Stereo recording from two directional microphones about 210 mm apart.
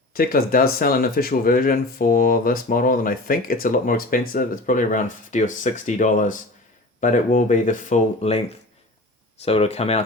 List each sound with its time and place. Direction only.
0.2 s speech: 45° left (ahead or behind)